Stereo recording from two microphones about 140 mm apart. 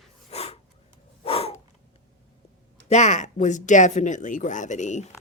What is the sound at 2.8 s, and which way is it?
Speech, 55° left (ahead or behind).